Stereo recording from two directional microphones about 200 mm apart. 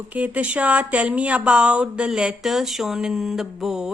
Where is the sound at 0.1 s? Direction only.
5° right (ahead or behind).